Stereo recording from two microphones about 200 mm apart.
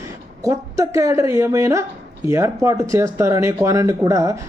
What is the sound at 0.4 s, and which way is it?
Speech, 15° right (ahead or behind).